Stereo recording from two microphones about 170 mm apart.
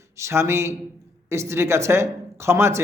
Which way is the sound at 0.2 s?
15° right (ahead or behind).